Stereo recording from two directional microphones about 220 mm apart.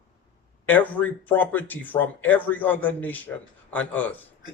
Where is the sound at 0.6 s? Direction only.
5° left (ahead or behind).